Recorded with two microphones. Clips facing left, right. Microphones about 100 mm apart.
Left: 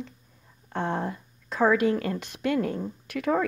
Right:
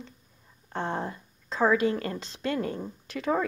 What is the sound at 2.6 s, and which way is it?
Speech, centre (ahead or behind).